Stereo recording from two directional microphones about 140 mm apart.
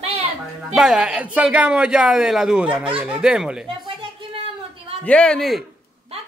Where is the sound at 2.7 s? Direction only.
35° right (ahead or behind).